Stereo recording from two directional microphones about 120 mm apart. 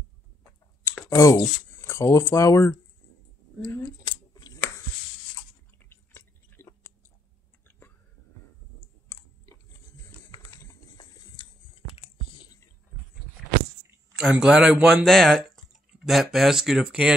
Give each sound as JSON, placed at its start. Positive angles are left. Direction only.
{"t": 0.9, "sound": "a sound", "side_deg": 25}
{"t": 1.4, "sound": "speech", "side_deg": 25}
{"t": 4.0, "sound": "scissors", "side_deg": 30}
{"t": 5.9, "sound": "chewing", "side_deg": 20}
{"t": 11.0, "sound": "a sound", "side_deg": 35}
{"t": 14.1, "sound": "speech", "side_deg": -5}